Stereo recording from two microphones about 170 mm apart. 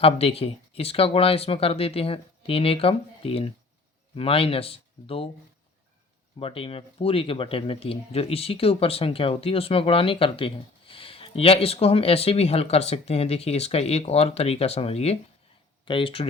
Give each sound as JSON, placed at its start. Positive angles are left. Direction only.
{"t": 0.0, "sound": "speech", "side_deg": 35}
{"t": 6.4, "sound": "speech", "side_deg": 35}